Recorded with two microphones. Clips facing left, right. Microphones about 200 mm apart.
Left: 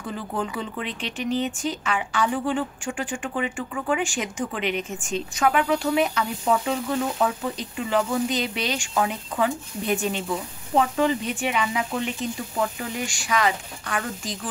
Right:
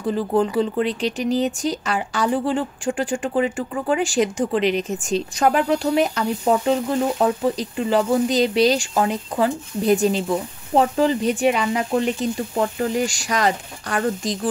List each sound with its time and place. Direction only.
0.0 s speech: 35° right (ahead or behind)